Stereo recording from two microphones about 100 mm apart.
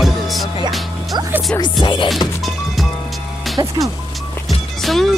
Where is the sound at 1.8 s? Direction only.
55° left (ahead or behind).